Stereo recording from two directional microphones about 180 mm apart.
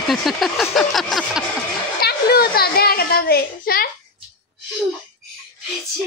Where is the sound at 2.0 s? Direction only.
60° left (ahead or behind).